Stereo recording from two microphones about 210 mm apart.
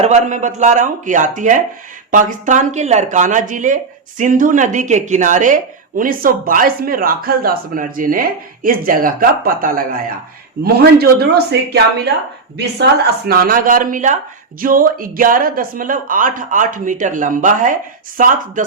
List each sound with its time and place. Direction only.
0.0 s a woman's voice: 35° right (ahead or behind)
12.5 s a woman's voice: 50° right (ahead or behind)